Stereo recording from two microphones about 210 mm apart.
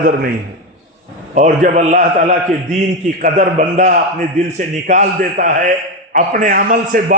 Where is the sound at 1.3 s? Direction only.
35° right (ahead or behind).